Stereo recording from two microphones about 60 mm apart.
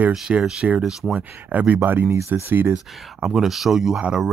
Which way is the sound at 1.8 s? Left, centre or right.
Right.